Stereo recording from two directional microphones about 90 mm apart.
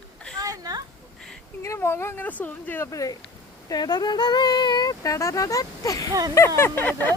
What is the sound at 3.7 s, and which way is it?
Speech, 50° left (ahead or behind).